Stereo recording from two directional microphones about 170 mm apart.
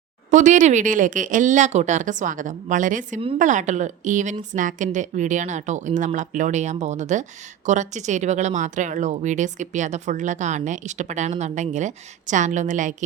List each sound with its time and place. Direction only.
0.3 s a woman's voice: 45° right (ahead or behind)